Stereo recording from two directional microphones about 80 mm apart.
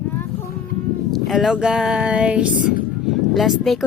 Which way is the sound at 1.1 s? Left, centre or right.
Centre.